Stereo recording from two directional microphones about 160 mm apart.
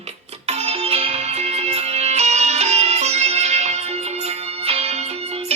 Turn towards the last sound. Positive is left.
turn(degrees=-40)  # may be behind; listen again after turning